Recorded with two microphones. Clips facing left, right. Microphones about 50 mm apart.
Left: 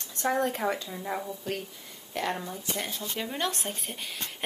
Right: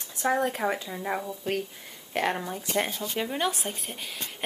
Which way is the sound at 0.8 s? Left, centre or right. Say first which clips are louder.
Right 3 dB; centre.